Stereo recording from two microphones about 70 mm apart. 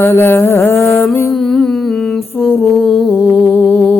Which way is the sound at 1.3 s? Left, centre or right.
Centre.